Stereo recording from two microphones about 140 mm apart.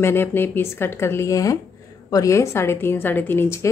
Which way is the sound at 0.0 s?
15° left (ahead or behind).